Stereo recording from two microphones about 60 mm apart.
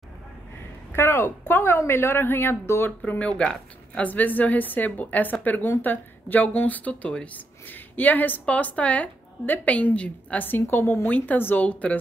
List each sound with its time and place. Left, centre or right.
0.9 s a woman's voice: left
3.1 s speech: centre
4.1 s a woman's voice: left
11.1 s a woman's voice: left